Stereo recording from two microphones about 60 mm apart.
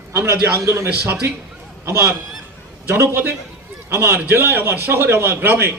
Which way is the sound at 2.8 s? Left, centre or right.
Right.